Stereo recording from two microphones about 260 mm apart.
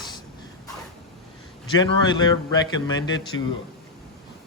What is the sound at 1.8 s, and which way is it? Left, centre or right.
Speech, centre.